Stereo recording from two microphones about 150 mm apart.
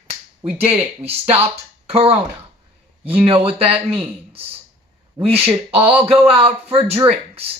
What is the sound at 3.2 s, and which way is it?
Speech, 40° right (ahead or behind).